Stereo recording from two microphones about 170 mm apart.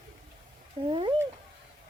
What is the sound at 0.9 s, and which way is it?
Cat, 30° right (ahead or behind).